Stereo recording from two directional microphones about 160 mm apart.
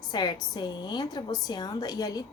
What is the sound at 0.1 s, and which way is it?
A woman's voice, 25° left (ahead or behind).